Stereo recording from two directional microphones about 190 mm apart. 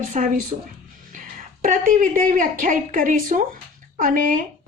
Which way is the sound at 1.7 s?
45° right (ahead or behind).